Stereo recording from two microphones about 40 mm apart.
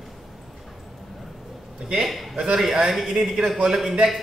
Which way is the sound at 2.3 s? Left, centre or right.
Right.